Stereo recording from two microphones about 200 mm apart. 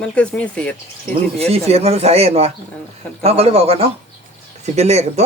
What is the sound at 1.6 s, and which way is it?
A man's voice, 30° right (ahead or behind).